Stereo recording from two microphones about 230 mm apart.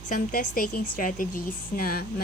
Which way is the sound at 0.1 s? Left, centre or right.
Left.